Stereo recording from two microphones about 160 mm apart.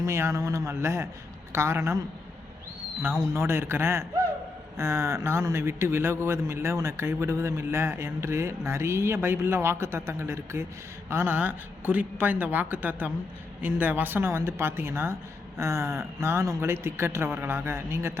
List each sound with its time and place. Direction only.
0.0 s a man's voice: 20° right (ahead or behind)
3.0 s a man's voice: 15° right (ahead or behind)